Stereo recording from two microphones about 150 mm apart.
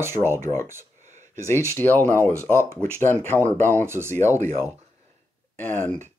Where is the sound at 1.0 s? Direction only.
50° right (ahead or behind).